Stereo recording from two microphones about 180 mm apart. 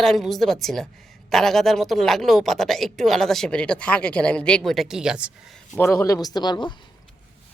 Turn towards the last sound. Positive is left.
turn(degrees=25)  # may be behind; listen again after turning